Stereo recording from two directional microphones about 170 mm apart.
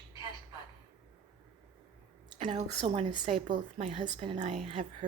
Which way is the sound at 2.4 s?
40° right (ahead or behind).